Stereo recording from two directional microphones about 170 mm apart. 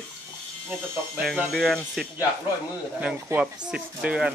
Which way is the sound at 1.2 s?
Centre (ahead or behind).